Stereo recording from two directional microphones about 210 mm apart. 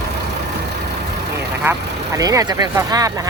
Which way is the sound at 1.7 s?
10° right (ahead or behind).